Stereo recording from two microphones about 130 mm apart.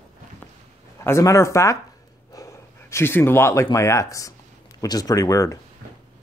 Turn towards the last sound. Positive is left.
turn(degrees=25)  # may be behind; listen again after turning